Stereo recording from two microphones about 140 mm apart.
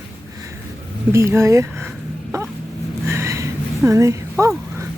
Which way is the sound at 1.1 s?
20° right (ahead or behind).